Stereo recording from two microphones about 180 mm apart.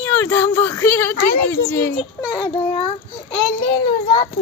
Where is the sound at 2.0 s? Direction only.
25° left (ahead or behind).